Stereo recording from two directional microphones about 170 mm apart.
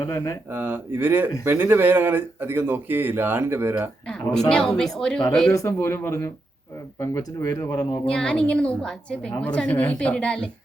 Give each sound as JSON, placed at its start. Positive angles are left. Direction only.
{"t": 0.0, "sound": "speech", "side_deg": 20}
{"t": 0.5, "sound": "speech", "side_deg": -10}
{"t": 4.4, "sound": "a woman's voice", "side_deg": 5}
{"t": 5.5, "sound": "a woman's voice", "side_deg": 15}
{"t": 8.0, "sound": "a woman's voice", "side_deg": 5}